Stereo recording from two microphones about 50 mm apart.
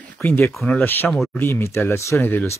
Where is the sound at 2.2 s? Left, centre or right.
Left.